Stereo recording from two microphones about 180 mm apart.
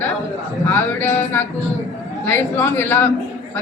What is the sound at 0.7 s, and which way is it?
A man's voice, 10° left (ahead or behind).